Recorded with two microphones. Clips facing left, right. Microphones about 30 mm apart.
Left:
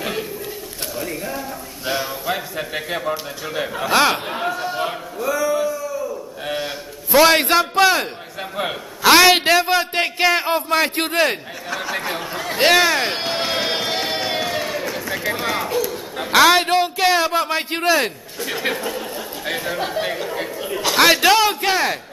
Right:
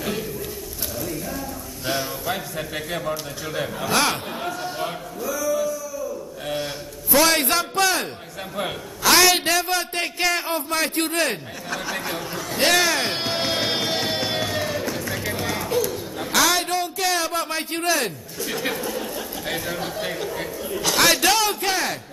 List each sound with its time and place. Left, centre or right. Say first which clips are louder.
0.9 s speech: left 3 dB; left
1.9 s a man's voice: left 3 dB; centre
5.2 s music: left 4 dB; left
6.4 s a sound: left 2 dB; left
8.5 s a man's voice: left 3 dB; left
11.7 s a man's voice: left 3 dB; centre
12.4 s run: left 5 dB; left
15.7 s a sound: left 1 dB; centre
16.2 s a man's voice: left 7 dB; left